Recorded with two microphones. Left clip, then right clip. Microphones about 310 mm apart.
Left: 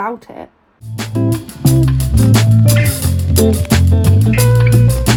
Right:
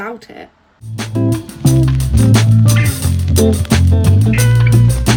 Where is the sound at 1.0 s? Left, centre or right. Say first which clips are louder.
Even; centre.